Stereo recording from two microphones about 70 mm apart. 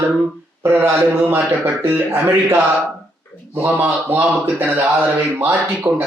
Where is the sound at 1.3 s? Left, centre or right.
Right.